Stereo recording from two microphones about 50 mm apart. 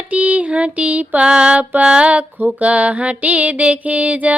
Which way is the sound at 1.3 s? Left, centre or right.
Centre.